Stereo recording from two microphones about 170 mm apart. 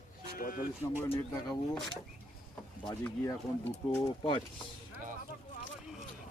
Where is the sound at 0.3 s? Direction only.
60° left (ahead or behind).